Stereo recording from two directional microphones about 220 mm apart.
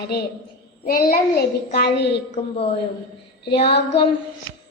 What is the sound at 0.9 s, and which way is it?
A child's voice, 45° left (ahead or behind).